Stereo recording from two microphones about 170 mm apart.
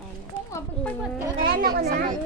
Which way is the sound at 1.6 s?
65° right (ahead or behind).